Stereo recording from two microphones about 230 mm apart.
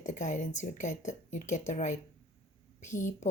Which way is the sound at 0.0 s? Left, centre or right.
Left.